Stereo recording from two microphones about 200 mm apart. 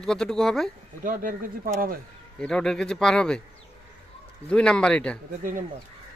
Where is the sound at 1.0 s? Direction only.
45° right (ahead or behind).